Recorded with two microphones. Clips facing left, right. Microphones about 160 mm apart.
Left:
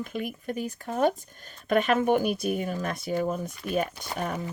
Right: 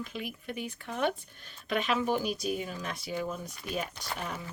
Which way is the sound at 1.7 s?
50° left (ahead or behind).